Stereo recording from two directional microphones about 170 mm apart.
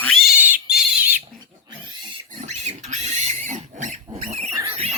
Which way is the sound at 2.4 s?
40° right (ahead or behind).